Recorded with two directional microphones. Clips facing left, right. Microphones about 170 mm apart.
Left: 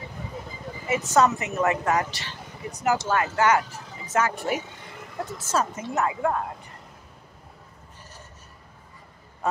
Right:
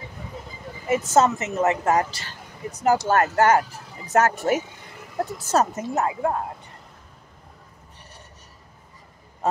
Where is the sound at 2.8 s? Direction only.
50° right (ahead or behind); by 6.2 s 35° right (ahead or behind).